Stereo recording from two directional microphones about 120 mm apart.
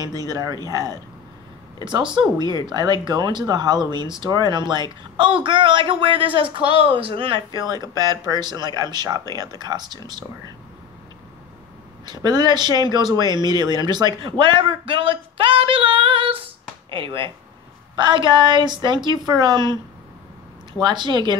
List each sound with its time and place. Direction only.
0.0 s speech: 30° right (ahead or behind)
2.1 s speech: 40° right (ahead or behind)
7.6 s speech: 35° right (ahead or behind)
12.1 s speech: 35° right (ahead or behind)
20.8 s speech: 40° right (ahead or behind)